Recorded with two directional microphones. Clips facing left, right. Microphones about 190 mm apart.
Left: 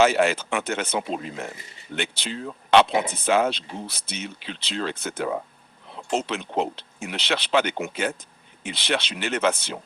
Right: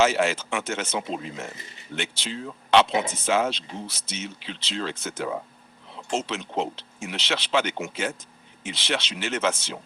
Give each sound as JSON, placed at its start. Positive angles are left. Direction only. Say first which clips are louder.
{"t": 0.0, "sound": "speech", "louder": "left 2 dB", "side_deg": 60}